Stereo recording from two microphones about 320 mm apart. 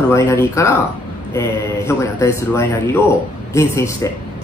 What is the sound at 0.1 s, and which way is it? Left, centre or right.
Speech, centre.